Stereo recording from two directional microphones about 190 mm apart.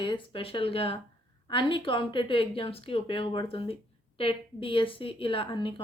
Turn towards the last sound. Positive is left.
turn(degrees=25)  # may be behind; listen again after turning